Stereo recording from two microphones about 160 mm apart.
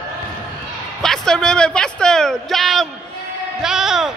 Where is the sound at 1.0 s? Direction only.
5° left (ahead or behind).